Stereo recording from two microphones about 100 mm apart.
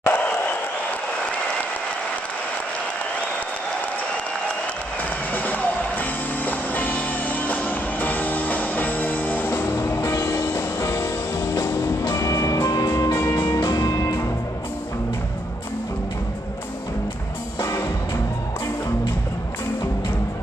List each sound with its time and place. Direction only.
0.0 s a sound: 15° left (ahead or behind)
5.3 s music: 15° left (ahead or behind)
13.7 s music: 40° left (ahead or behind)
17.6 s music: 25° left (ahead or behind)